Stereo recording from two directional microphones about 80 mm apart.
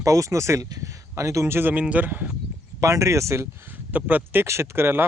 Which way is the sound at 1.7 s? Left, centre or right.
Centre.